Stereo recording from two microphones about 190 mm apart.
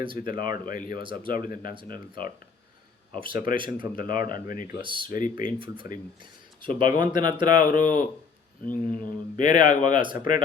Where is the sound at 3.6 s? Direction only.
25° right (ahead or behind).